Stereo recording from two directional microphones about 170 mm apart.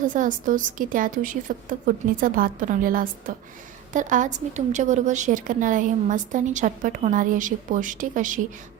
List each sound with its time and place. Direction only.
0.0 s a woman's voice: 50° right (ahead or behind)